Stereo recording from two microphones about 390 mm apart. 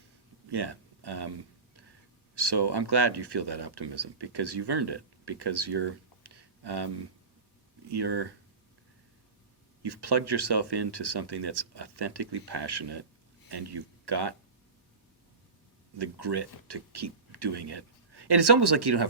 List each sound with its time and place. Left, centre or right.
0.5 s speech: right
9.8 s speech: right
16.0 s speech: right